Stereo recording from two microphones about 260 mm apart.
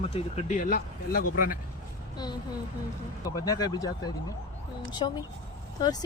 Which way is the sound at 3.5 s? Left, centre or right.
Centre.